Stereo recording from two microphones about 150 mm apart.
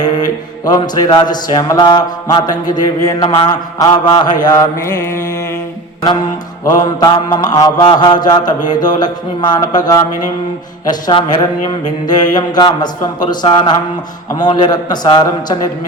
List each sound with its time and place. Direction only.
0.6 s mantra: 25° left (ahead or behind)
6.7 s mantra: 25° left (ahead or behind)
11.0 s speech: 30° left (ahead or behind)
12.0 s mantra: 25° left (ahead or behind)